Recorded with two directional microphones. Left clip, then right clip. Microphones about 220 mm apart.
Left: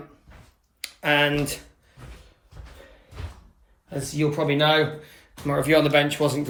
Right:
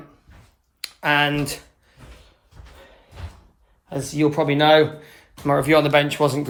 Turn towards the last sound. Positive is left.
turn(degrees=-15)  # may be behind; listen again after turning